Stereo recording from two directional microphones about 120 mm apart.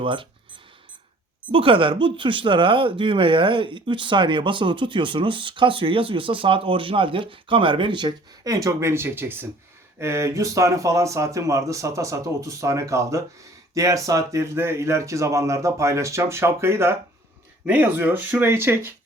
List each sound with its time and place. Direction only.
0.0 s speech: 45° right (ahead or behind); by 18.9 s 20° right (ahead or behind)